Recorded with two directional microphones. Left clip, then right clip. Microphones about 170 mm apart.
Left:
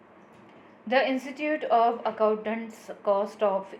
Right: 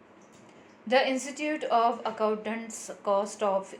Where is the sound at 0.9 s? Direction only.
40° right (ahead or behind).